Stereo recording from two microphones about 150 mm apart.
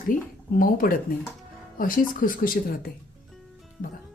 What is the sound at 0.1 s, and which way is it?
Speech, 60° left (ahead or behind).